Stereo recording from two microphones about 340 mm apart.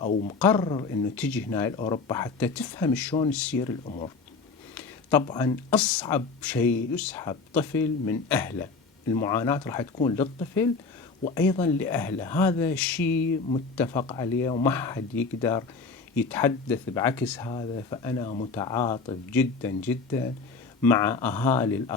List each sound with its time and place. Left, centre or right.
0.0 s speech: centre
0.3 s speech: centre
4.7 s speech: centre